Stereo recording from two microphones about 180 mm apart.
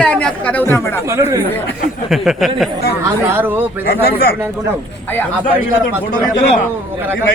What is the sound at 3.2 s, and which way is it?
Speech, 10° right (ahead or behind).